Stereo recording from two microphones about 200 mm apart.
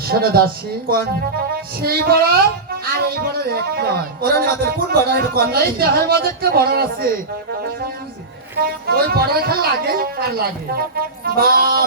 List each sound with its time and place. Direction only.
0.1 s speech: 50° right (ahead or behind)
8.6 s speech: 50° right (ahead or behind)